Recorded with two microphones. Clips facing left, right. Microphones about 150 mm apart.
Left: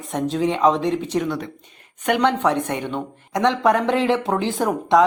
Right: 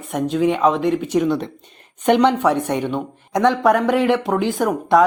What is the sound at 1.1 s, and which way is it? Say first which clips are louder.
Speech: right 5 dB; 25° right (ahead or behind).